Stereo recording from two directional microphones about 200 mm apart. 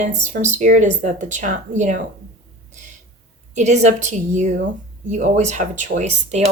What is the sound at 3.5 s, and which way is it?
Speech, 35° right (ahead or behind).